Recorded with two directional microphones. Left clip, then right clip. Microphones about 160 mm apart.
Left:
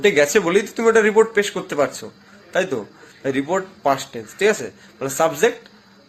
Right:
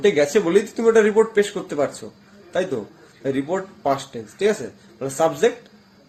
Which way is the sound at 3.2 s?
10° left (ahead or behind).